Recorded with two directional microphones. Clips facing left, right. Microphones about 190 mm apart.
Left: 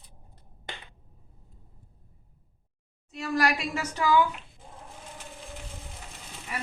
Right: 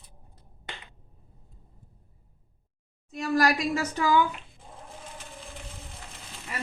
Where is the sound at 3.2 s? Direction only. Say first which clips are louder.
Right 3 dB; 35° right (ahead or behind).